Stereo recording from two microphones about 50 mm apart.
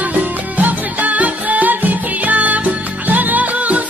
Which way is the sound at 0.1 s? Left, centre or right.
Right.